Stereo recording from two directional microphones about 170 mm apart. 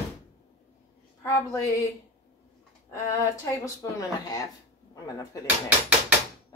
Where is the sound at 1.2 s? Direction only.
20° left (ahead or behind).